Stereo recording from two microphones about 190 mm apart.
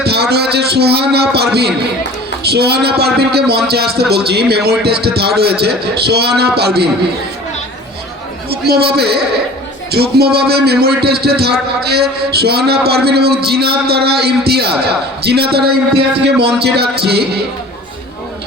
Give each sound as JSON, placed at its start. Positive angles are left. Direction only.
{"t": 0.0, "sound": "a man's voice", "side_deg": -60}
{"t": 8.4, "sound": "a man's voice", "side_deg": -55}